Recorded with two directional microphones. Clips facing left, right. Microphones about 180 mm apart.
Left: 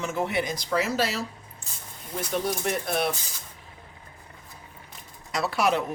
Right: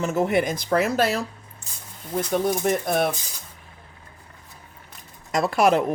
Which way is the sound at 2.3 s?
50° right (ahead or behind).